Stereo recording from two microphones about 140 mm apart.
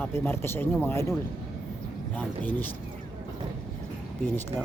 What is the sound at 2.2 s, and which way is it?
Speech, 15° left (ahead or behind).